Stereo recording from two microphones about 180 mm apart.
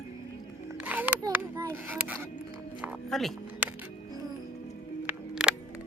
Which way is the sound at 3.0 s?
Centre (ahead or behind).